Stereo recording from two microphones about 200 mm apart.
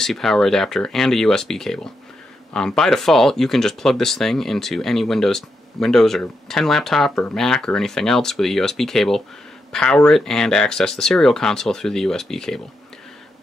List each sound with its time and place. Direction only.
0.0 s speech: centre (ahead or behind)